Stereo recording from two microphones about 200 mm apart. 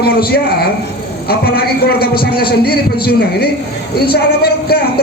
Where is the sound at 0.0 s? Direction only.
50° left (ahead or behind).